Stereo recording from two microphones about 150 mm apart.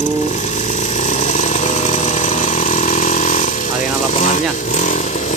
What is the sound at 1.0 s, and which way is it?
Chainsaw, 55° left (ahead or behind).